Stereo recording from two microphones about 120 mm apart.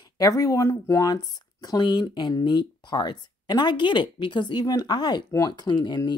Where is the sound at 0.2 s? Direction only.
30° left (ahead or behind).